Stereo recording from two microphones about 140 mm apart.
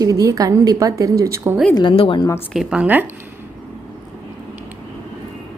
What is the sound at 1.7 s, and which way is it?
Speech, 35° left (ahead or behind).